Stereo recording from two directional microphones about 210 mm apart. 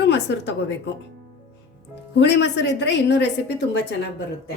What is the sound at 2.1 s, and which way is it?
A woman's voice, 55° left (ahead or behind).